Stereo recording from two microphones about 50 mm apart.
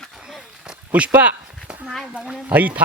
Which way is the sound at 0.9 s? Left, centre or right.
Right.